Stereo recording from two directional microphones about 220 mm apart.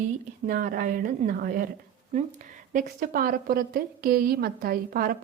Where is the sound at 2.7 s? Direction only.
40° right (ahead or behind).